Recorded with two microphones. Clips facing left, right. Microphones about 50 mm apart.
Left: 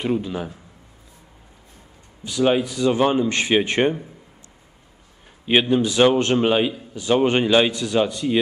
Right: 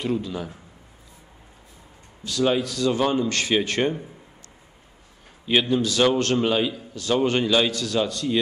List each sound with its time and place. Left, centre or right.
0.0 s a man's voice: left
2.2 s a man's voice: left
5.4 s a man's voice: left